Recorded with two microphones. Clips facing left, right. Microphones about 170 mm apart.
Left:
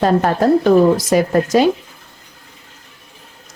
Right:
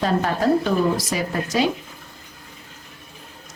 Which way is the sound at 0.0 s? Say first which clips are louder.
Left 6 dB; 50° left (ahead or behind).